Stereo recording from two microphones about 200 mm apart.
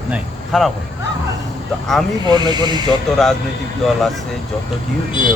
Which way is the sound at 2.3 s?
20° right (ahead or behind).